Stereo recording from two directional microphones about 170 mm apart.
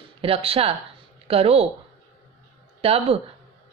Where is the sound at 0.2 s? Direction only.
35° right (ahead or behind).